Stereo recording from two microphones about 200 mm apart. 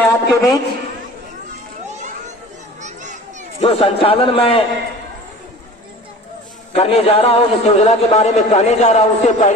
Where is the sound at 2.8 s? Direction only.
35° right (ahead or behind).